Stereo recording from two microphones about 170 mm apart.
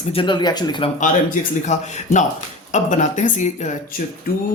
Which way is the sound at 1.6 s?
45° left (ahead or behind).